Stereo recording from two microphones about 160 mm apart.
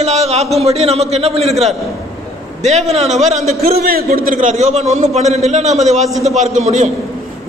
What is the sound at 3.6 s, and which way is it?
A man's voice, 70° right (ahead or behind).